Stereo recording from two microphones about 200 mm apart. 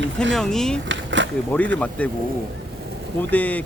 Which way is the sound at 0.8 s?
65° right (ahead or behind).